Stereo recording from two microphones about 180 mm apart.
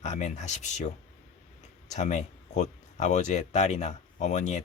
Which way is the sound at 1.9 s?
40° left (ahead or behind).